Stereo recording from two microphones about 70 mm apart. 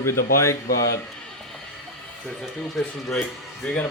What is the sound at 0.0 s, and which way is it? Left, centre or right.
Speech, left.